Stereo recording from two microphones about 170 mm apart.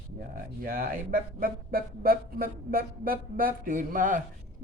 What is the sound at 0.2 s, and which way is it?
Speech, 55° right (ahead or behind).